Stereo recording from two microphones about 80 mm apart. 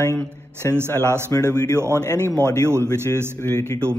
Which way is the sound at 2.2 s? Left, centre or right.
Left.